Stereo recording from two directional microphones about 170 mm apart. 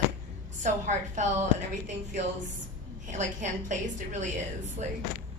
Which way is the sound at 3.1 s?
45° right (ahead or behind).